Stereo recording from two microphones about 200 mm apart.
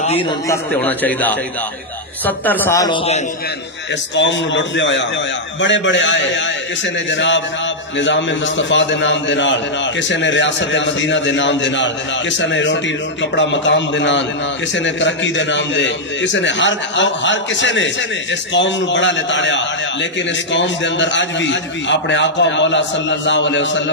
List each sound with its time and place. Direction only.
0.5 s a man's voice: 10° left (ahead or behind)
4.1 s a man's voice: 65° left (ahead or behind)